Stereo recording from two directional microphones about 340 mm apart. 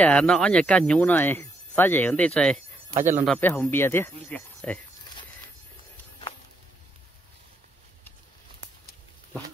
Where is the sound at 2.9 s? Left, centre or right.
Right.